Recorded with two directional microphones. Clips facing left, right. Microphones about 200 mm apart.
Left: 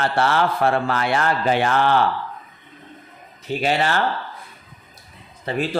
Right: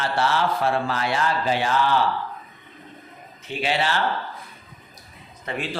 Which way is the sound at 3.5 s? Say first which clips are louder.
Left 3 dB; 45° left (ahead or behind).